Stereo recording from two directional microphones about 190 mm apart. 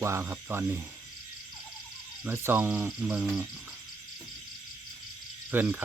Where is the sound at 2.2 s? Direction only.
10° right (ahead or behind).